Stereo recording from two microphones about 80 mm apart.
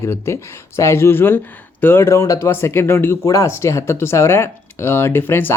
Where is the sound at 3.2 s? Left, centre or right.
Left.